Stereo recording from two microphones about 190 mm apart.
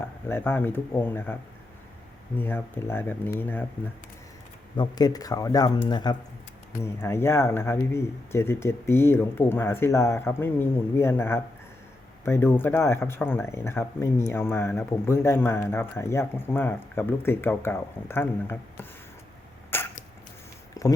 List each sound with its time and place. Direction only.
0.3 s speech: 10° left (ahead or behind)
4.8 s speech: 20° left (ahead or behind)
19.7 s a sound: 10° left (ahead or behind)